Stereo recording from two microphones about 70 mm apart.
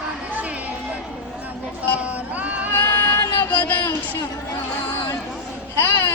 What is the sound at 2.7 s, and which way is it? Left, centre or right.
Music, left.